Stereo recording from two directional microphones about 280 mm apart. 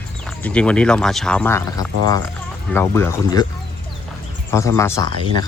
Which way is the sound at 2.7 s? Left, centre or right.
Centre.